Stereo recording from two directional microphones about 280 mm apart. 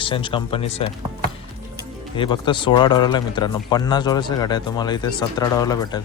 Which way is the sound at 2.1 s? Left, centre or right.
Centre.